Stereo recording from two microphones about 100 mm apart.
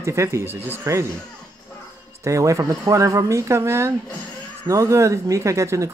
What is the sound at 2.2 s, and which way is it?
Speech, 30° right (ahead or behind).